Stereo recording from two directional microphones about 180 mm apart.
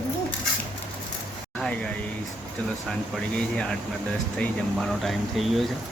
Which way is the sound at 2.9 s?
5° left (ahead or behind).